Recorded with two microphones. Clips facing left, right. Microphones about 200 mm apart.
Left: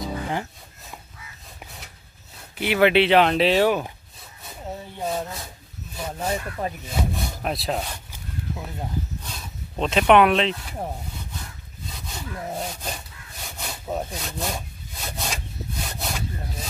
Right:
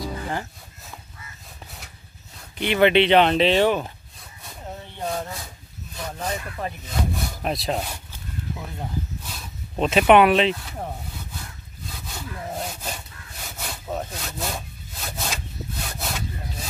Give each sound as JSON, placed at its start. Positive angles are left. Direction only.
{"t": 0.0, "sound": "livestock", "side_deg": 15}
{"t": 2.5, "sound": "speech", "side_deg": 5}
{"t": 4.9, "sound": "speech", "side_deg": 5}
{"t": 9.2, "sound": "speech", "side_deg": -5}
{"t": 12.5, "sound": "speech", "side_deg": 0}
{"t": 13.8, "sound": "wood", "side_deg": 5}
{"t": 15.8, "sound": "sawing", "side_deg": 0}